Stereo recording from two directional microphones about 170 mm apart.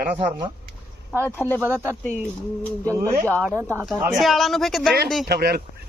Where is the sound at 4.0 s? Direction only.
Centre (ahead or behind).